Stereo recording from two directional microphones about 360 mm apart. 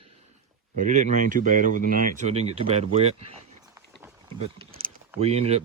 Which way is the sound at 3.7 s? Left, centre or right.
Centre.